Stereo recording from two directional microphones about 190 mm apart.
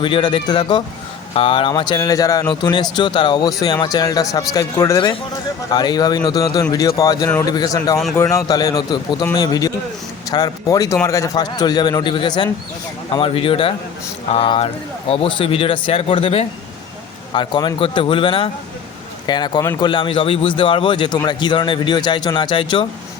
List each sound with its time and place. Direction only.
0.0 s a man's voice: 25° left (ahead or behind)